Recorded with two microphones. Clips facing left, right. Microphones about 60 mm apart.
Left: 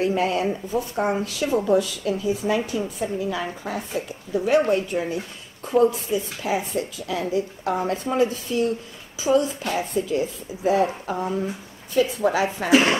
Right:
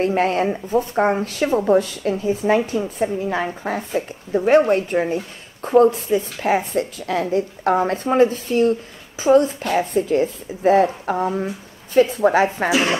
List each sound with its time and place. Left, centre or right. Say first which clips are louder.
0.0 s speech: right 3 dB; right